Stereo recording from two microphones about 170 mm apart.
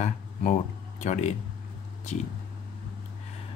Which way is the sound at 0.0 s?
45° left (ahead or behind).